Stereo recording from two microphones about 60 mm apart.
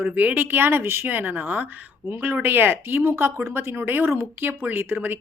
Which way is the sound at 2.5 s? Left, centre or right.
Right.